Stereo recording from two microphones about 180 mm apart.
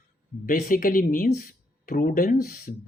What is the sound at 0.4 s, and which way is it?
A man's voice, 50° left (ahead or behind).